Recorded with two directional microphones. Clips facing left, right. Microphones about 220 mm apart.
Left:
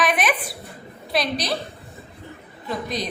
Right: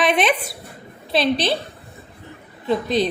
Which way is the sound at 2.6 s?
30° right (ahead or behind).